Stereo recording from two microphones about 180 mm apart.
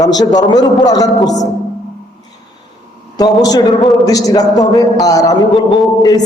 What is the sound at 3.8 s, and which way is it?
Speech, centre (ahead or behind).